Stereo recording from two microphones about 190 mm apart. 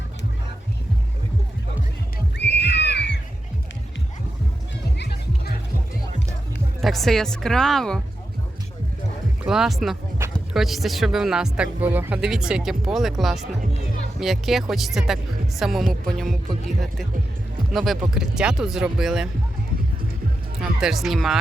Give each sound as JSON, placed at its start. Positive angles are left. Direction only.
{"t": 2.4, "sound": "music", "side_deg": 65}
{"t": 4.9, "sound": "music", "side_deg": 60}
{"t": 6.8, "sound": "speech", "side_deg": 0}
{"t": 9.4, "sound": "speech", "side_deg": -5}
{"t": 20.6, "sound": "speech", "side_deg": 0}